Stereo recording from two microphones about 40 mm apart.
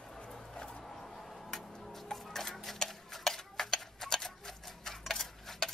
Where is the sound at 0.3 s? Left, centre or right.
Centre.